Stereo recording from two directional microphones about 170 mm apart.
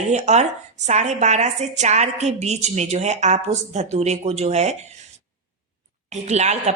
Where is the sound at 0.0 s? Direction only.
40° right (ahead or behind).